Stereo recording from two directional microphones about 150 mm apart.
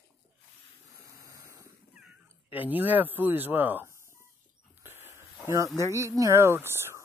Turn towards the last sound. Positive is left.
turn(degrees=-15)  # may be behind; listen again after turning